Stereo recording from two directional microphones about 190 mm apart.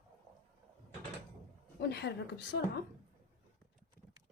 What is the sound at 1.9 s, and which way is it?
Speech, 60° left (ahead or behind).